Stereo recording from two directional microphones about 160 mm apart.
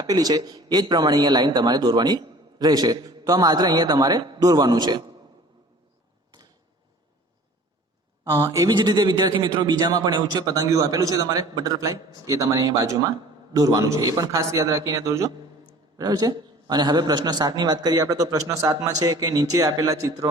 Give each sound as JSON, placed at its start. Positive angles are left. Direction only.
{"t": 0.0, "sound": "a man's voice", "side_deg": -25}
{"t": 8.2, "sound": "a man's voice", "side_deg": -20}